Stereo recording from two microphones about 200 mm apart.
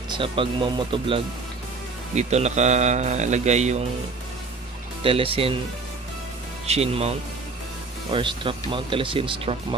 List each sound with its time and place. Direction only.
0.1 s a man's voice: 25° right (ahead or behind)
5.0 s speech: 25° right (ahead or behind)
6.6 s a man's voice: 30° right (ahead or behind)